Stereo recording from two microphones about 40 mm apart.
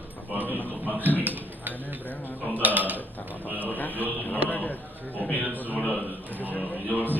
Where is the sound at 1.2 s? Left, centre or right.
Right.